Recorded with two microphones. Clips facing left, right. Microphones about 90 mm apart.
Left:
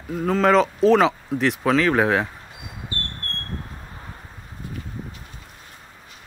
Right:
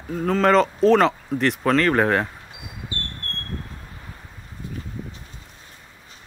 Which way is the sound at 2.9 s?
35° left (ahead or behind).